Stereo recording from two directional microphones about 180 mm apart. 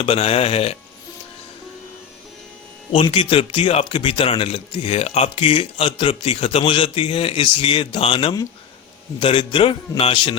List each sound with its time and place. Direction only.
0.0 s speech: 35° left (ahead or behind)
2.9 s speech: 30° left (ahead or behind)